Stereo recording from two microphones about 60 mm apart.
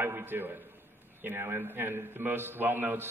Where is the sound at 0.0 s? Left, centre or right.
Right.